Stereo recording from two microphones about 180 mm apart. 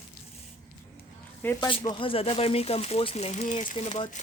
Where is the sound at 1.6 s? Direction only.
25° left (ahead or behind).